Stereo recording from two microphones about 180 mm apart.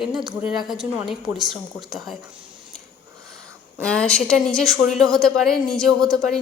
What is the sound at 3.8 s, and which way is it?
A woman's voice, 5° left (ahead or behind).